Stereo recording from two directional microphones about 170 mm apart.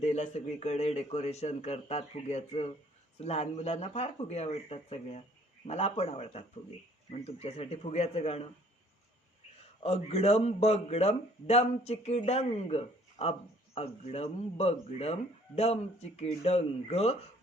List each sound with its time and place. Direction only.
0.0 s speech: 40° left (ahead or behind)
9.8 s speech: 35° left (ahead or behind)